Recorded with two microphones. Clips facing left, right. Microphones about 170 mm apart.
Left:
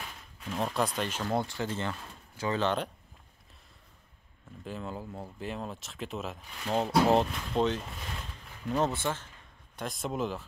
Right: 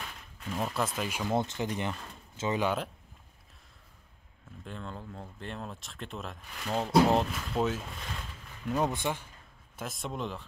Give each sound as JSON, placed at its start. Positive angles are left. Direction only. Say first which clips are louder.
{"t": 0.0, "sound": "speech", "louder": "even", "side_deg": 5}
{"t": 1.3, "sound": "speech", "louder": "right 2 dB", "side_deg": -20}
{"t": 4.6, "sound": "speech", "louder": "left 3 dB", "side_deg": 5}
{"t": 9.8, "sound": "speech", "louder": "left 4 dB", "side_deg": 0}